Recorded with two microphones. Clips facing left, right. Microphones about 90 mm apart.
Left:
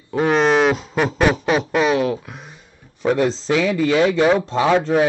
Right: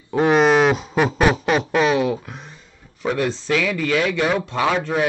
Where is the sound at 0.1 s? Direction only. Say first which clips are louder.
Right 1 dB; centre (ahead or behind).